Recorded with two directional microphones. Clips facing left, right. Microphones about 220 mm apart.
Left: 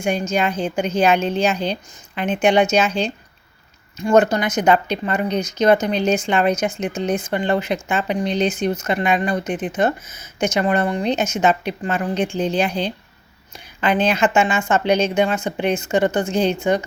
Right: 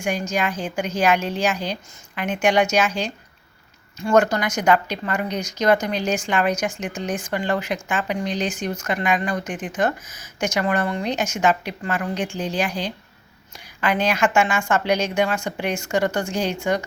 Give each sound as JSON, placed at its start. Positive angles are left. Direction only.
{"t": 0.0, "sound": "speech", "side_deg": 25}